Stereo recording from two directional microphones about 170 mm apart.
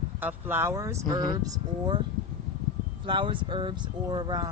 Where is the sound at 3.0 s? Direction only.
30° right (ahead or behind).